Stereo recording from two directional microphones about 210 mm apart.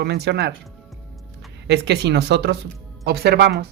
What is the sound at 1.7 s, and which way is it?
Speech, 55° right (ahead or behind).